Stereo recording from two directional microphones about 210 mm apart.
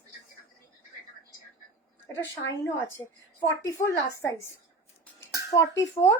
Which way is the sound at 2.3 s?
10° left (ahead or behind).